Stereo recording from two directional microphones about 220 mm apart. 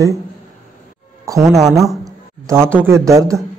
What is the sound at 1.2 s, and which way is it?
Speech, 15° right (ahead or behind).